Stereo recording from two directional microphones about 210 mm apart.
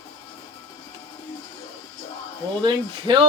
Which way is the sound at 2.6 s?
25° right (ahead or behind).